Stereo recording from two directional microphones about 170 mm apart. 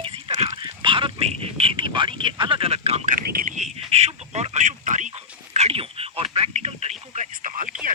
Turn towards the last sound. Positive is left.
turn(degrees=-50)  # may be behind; listen again after turning